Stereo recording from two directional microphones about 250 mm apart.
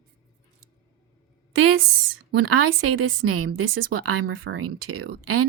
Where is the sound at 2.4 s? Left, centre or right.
Right.